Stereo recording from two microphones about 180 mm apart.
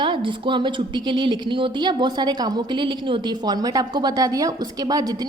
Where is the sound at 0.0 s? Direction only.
25° right (ahead or behind).